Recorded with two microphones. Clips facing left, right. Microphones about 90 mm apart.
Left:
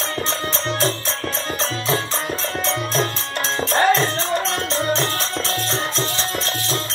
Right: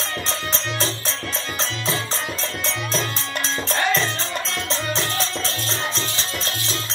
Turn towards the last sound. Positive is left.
turn(degrees=45)  # may be behind; listen again after turning